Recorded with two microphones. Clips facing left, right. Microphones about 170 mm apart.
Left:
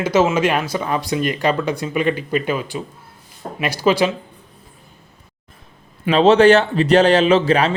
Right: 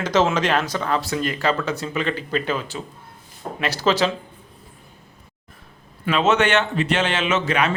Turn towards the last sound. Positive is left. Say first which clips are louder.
# left 7 dB
turn(degrees=30)  # may be behind; listen again after turning